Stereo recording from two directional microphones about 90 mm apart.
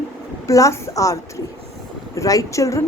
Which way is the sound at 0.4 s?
35° left (ahead or behind).